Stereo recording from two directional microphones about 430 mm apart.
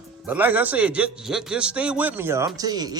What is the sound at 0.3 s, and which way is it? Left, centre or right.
A man's voice, centre.